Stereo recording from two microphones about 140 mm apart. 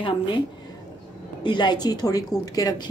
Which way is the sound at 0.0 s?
35° left (ahead or behind).